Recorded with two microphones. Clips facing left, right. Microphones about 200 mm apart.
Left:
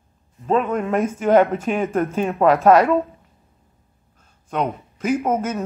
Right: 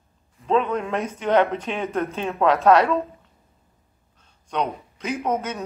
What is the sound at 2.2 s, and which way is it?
Speech, 5° left (ahead or behind).